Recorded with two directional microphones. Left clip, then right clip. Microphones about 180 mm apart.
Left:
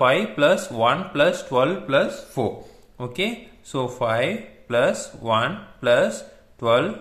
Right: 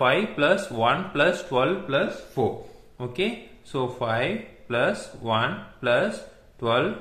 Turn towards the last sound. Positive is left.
turn(degrees=25)  # may be behind; listen again after turning